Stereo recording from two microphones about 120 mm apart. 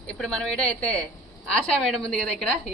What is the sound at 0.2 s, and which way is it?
A woman's voice, 5° left (ahead or behind).